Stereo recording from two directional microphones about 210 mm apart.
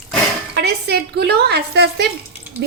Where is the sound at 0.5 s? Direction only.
50° right (ahead or behind).